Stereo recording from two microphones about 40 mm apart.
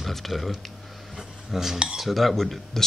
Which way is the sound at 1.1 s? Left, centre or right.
Centre.